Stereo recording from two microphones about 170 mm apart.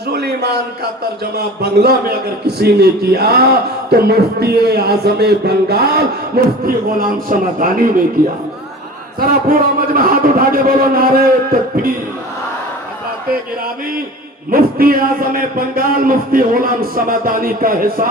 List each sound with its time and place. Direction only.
0.1 s a sound: 70° right (ahead or behind)
1.4 s a man's voice: 70° right (ahead or behind)
7.0 s speech: 55° right (ahead or behind)
9.2 s a man's voice: 55° right (ahead or behind)
14.5 s a man's voice: 60° right (ahead or behind)